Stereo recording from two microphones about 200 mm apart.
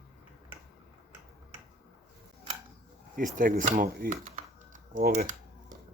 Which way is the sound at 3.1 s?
40° right (ahead or behind).